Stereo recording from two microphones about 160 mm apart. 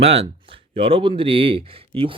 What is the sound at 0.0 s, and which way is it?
Speech, 40° right (ahead or behind).